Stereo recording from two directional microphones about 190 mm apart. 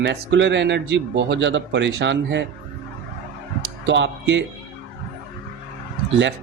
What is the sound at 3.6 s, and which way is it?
Music, 75° right (ahead or behind).